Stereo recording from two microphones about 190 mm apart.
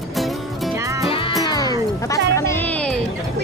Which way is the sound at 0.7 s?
15° right (ahead or behind).